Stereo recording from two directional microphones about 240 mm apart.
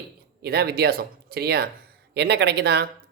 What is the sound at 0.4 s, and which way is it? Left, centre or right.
Speech, right.